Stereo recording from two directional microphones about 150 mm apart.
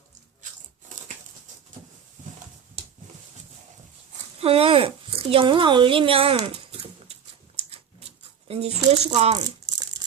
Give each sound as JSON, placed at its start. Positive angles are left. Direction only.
{"t": 4.4, "sound": "speech", "side_deg": -40}
{"t": 6.4, "sound": "dog", "side_deg": -45}
{"t": 8.4, "sound": "speech", "side_deg": -40}